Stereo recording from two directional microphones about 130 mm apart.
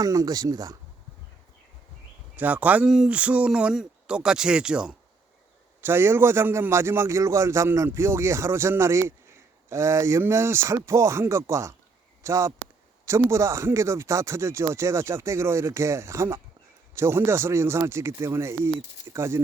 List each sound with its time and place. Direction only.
0.0 s speech: 30° right (ahead or behind)
2.3 s speech: 15° right (ahead or behind)
5.8 s speech: 15° right (ahead or behind)